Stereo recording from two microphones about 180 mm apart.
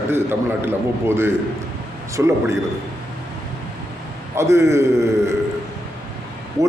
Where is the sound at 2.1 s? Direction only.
15° right (ahead or behind).